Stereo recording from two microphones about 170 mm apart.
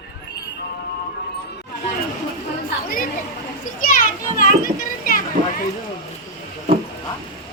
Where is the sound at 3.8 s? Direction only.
50° left (ahead or behind).